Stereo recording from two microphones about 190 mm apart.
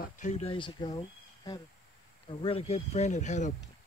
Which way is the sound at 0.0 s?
40° left (ahead or behind).